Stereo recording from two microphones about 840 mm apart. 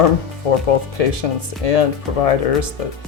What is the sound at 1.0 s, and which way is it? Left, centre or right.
Speech, left.